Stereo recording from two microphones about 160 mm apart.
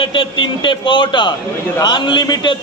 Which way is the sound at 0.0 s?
30° left (ahead or behind).